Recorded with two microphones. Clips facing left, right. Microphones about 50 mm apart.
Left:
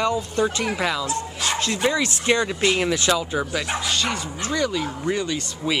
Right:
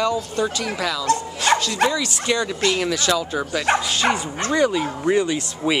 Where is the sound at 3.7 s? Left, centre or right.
Right.